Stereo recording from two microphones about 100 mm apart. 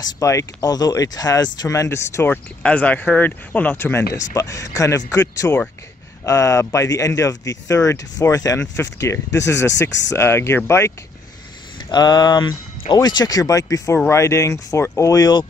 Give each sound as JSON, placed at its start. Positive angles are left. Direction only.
{"t": 0.0, "sound": "speech", "side_deg": 30}
{"t": 11.9, "sound": "speech", "side_deg": 45}